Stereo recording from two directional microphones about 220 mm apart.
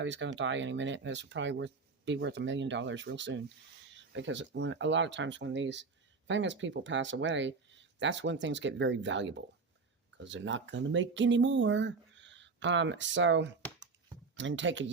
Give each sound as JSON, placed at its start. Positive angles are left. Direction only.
{"t": 0.0, "sound": "speech", "side_deg": -55}